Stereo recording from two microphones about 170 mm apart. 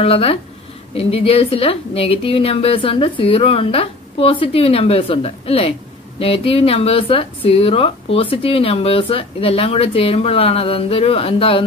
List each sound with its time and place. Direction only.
0.0 s a woman's voice: 35° left (ahead or behind)